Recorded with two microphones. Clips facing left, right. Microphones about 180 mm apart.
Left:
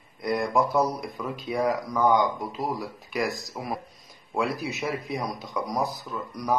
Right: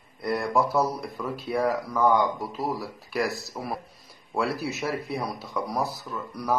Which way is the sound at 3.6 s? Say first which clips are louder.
Even; 5° left (ahead or behind).